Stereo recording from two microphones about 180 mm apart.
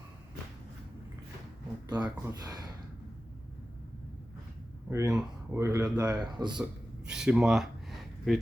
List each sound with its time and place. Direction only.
1.9 s speech: 25° right (ahead or behind)
4.9 s speech: 15° right (ahead or behind)
6.6 s a sound: 5° right (ahead or behind)